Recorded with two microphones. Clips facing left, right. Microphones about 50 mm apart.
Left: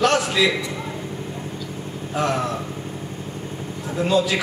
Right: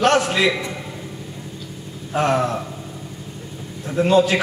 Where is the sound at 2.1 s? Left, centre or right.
Right.